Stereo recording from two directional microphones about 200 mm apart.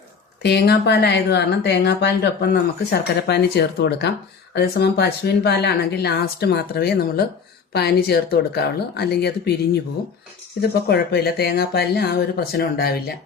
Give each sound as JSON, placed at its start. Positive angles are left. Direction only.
{"t": 0.4, "sound": "speech", "side_deg": 55}
{"t": 10.6, "sound": "speech", "side_deg": 50}